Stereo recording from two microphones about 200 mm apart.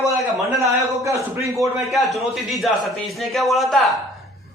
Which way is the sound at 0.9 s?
15° right (ahead or behind).